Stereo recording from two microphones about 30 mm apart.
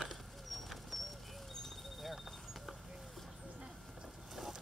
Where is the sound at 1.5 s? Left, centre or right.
Centre.